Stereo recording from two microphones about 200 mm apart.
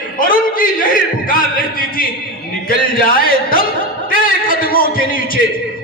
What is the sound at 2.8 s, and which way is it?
Speech, 45° left (ahead or behind).